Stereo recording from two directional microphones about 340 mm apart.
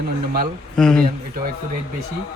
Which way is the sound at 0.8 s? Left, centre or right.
Centre.